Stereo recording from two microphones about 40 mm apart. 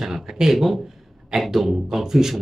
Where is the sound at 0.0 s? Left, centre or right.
Centre.